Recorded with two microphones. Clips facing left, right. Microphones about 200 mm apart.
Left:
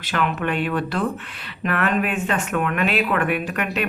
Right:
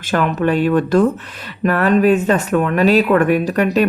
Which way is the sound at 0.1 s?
40° right (ahead or behind).